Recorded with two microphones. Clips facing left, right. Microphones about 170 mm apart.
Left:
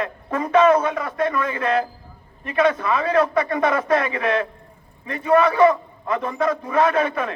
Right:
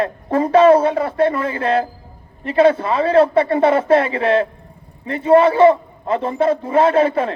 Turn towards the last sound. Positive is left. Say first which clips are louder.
# right 5 dB
turn(degrees=-30)  # may be behind; listen again after turning